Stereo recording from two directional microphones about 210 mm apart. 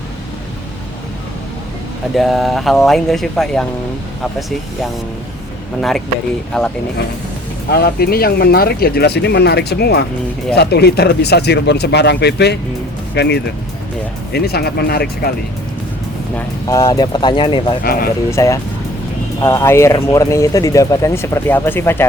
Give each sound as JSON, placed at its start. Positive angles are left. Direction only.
{"t": 2.1, "sound": "speech", "side_deg": 0}
{"t": 6.5, "sound": "speech", "side_deg": 0}
{"t": 7.7, "sound": "speech", "side_deg": 50}
{"t": 16.3, "sound": "speech", "side_deg": 15}